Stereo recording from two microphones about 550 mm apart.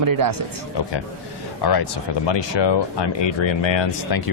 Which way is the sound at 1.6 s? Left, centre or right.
Left.